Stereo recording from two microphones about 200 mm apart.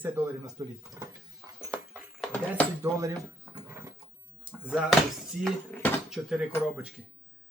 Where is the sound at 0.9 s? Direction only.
10° right (ahead or behind).